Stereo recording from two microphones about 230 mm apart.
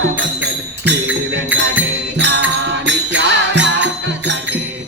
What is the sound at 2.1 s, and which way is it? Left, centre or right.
Music, right.